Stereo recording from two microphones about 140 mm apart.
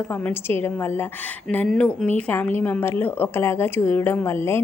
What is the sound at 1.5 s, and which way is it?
A woman's voice, 5° left (ahead or behind).